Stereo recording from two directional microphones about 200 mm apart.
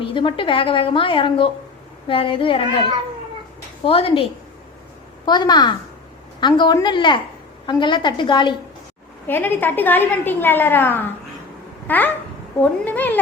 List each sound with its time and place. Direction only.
0.0 s a woman's voice: 25° left (ahead or behind)
3.8 s a woman's voice: 30° left (ahead or behind)
9.2 s a woman's voice: 10° left (ahead or behind)